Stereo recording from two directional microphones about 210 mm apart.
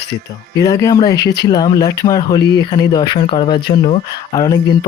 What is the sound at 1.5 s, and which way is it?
Speech, 20° left (ahead or behind).